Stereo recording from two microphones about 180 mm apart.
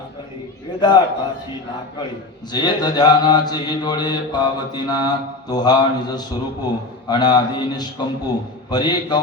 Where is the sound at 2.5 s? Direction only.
25° left (ahead or behind).